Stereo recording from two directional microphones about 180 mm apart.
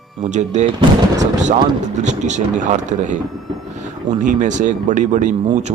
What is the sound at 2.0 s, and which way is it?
Speech, 40° right (ahead or behind).